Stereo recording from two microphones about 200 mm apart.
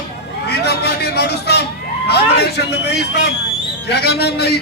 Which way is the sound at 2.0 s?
55° left (ahead or behind).